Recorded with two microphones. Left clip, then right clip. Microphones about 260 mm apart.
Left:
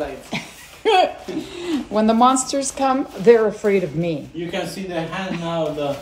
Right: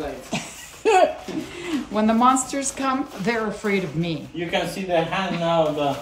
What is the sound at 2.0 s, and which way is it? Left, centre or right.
Speech, left.